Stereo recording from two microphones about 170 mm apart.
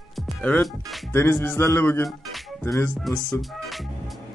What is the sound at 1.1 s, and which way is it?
Music, 15° left (ahead or behind).